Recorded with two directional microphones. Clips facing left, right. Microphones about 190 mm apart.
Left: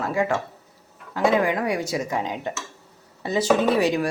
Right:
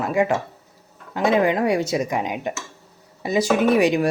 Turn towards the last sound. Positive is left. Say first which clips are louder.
# right 3 dB
turn(degrees=-15)  # may be behind; listen again after turning